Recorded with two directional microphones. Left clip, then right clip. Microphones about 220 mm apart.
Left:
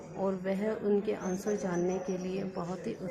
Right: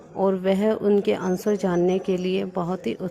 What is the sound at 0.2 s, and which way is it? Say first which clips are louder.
A woman's voice: right 11 dB; 35° right (ahead or behind).